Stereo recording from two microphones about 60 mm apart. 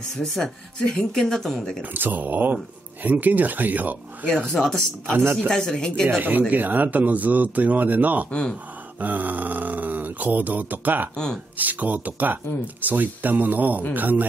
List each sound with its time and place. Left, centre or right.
0.2 s speech: centre
1.8 s speech: right
4.3 s speech: centre
6.0 s speech: right
8.3 s speech: centre
9.0 s speech: right